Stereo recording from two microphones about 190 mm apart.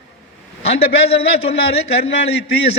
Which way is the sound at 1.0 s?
30° left (ahead or behind).